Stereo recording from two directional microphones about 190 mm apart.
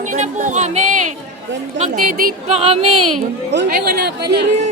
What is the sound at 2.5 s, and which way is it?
Female singing, 30° right (ahead or behind).